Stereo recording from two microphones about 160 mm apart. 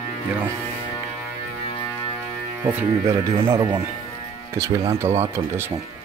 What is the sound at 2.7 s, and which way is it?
Speech, 15° right (ahead or behind).